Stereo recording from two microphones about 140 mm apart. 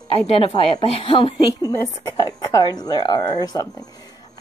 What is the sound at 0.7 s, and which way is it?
Speech, 40° left (ahead or behind).